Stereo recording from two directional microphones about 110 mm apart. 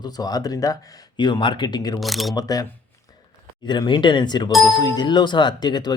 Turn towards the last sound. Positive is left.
turn(degrees=40)  # may be behind; listen again after turning